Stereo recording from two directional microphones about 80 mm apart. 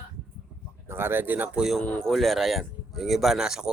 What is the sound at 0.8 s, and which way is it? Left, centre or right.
Speech, right.